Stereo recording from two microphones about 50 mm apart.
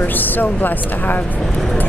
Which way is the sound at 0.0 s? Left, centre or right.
Left.